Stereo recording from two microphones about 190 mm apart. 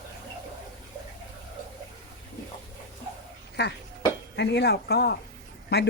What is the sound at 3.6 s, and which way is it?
Speech, 60° left (ahead or behind).